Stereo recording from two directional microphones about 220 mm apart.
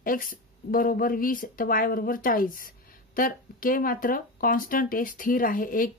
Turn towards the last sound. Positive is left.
turn(degrees=40)  # may be behind; listen again after turning